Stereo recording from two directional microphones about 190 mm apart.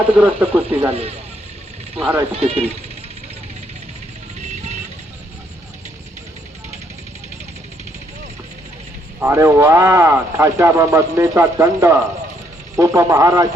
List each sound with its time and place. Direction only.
0.2 s speech: 5° right (ahead or behind)
0.9 s speech: 30° right (ahead or behind)
2.0 s speech: 5° right (ahead or behind)
2.3 s speech: 30° right (ahead or behind)
9.2 s speech: 15° right (ahead or behind)